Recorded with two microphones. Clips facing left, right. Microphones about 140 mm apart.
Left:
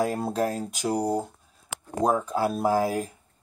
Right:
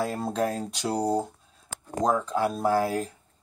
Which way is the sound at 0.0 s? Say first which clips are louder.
Left 2 dB; 10° left (ahead or behind).